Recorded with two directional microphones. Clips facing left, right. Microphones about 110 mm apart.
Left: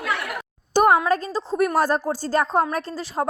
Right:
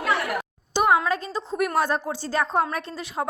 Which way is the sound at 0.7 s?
45° left (ahead or behind).